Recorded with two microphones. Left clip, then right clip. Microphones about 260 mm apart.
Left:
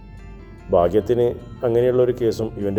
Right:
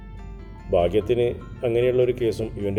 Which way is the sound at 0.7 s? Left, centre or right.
Centre.